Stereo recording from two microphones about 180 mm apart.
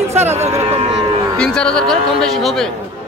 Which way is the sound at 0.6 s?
35° right (ahead or behind).